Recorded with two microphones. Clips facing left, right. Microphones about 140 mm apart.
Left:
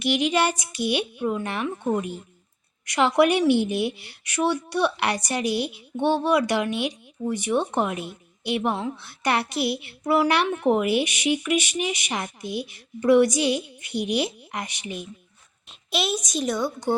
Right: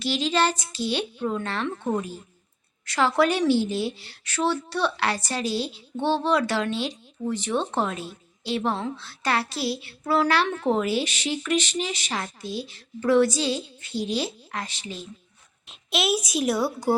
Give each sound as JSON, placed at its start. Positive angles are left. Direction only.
{"t": 0.0, "sound": "speech", "side_deg": 15}
{"t": 15.9, "sound": "a woman's voice", "side_deg": 0}